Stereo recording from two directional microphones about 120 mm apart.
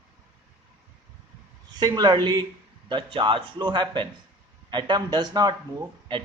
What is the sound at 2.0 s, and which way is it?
A man's voice, 40° right (ahead or behind).